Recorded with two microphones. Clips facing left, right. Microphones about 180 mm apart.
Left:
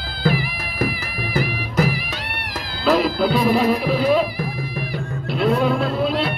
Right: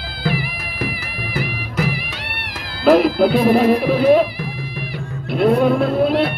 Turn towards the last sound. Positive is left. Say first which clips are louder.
# right 5 dB
turn(degrees=-55)  # may be behind; listen again after turning